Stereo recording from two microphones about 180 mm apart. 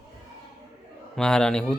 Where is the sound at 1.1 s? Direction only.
5° left (ahead or behind).